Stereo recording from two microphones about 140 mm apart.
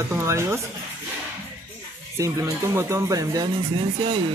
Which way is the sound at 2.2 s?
20° right (ahead or behind).